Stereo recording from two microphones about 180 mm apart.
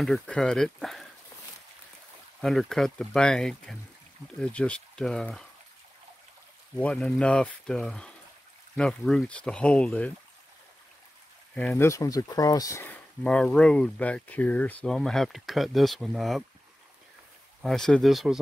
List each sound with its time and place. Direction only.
0.0 s speech: centre (ahead or behind)
2.4 s speech: centre (ahead or behind)
6.8 s speech: 5° left (ahead or behind)
11.5 s speech: 10° left (ahead or behind)
17.6 s speech: centre (ahead or behind)